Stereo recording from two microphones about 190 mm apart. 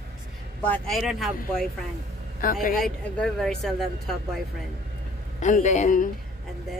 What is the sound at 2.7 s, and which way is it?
Speech, 5° left (ahead or behind).